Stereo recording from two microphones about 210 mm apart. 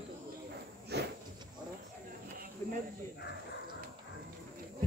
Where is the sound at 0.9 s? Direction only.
50° right (ahead or behind).